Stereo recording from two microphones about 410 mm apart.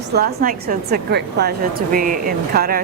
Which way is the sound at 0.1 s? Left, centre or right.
Right.